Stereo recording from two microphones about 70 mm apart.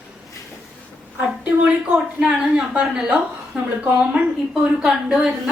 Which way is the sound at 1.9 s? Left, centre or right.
Centre.